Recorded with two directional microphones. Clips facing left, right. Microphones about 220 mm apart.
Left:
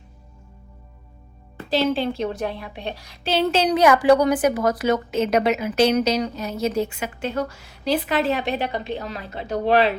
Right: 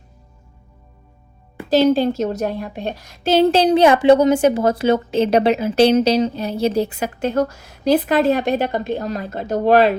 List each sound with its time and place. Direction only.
1.7 s a woman's voice: 45° right (ahead or behind)
3.4 s a woman's voice: 35° right (ahead or behind)